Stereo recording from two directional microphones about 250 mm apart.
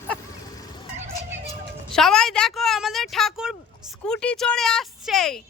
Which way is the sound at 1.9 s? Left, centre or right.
Centre.